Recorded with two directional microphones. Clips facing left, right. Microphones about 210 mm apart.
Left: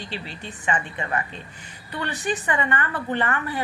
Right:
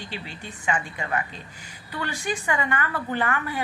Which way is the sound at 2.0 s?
10° right (ahead or behind).